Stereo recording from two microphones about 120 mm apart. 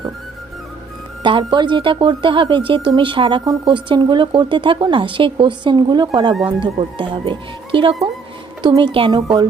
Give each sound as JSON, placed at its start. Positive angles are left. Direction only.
{"t": 1.2, "sound": "a woman's voice", "side_deg": -40}
{"t": 9.2, "sound": "speech", "side_deg": -30}